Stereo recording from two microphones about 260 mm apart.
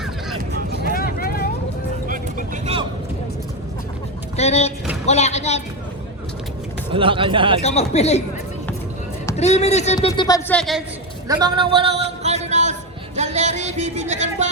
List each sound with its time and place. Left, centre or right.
0.9 s vehicle: left
4.4 s speech: left
6.9 s speech: centre
7.6 s speech: left
9.3 s speech: left
10.1 s speech: centre
10.6 s a woman's voice: centre
11.3 s a sound: centre
13.1 s music: right